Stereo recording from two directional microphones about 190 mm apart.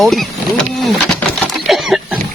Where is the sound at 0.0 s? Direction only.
Centre (ahead or behind).